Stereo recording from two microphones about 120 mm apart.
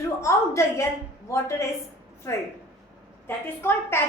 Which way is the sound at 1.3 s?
25° left (ahead or behind).